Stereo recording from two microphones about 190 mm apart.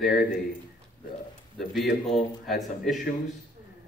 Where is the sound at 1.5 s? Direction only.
Centre (ahead or behind).